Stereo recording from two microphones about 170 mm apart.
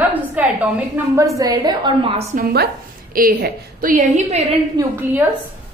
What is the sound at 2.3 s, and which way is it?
A woman's voice, 65° right (ahead or behind).